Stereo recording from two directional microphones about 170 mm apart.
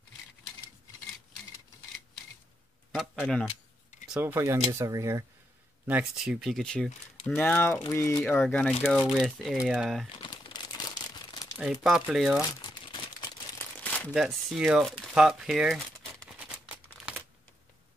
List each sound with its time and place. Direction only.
2.9 s speech: centre (ahead or behind)
4.1 s speech: 10° right (ahead or behind)
5.9 s speech: 5° right (ahead or behind); by 8.2 s 20° left (ahead or behind)
8.2 s speech: 5° left (ahead or behind)
10.2 s crumpling: 25° left (ahead or behind)
11.5 s speech: 5° right (ahead or behind)
12.6 s crumpling: 30° left (ahead or behind)
13.6 s crumpling: 10° left (ahead or behind)
14.1 s speech: 5° right (ahead or behind)